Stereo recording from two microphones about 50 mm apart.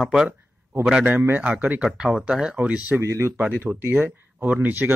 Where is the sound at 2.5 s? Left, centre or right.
Right.